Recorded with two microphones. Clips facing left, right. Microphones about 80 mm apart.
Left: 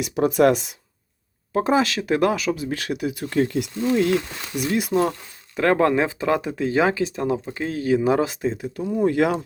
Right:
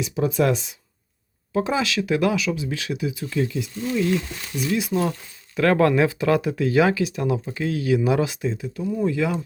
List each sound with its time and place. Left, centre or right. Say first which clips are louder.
0.0 s speech: left 4 dB; left
4.7 s speech: left 2 dB; left
5.5 s speech: even; left
9.0 s speech: left 4 dB; left